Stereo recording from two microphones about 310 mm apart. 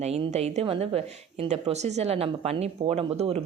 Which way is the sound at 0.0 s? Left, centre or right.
Centre.